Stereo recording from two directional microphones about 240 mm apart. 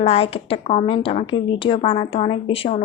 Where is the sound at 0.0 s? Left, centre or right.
Left.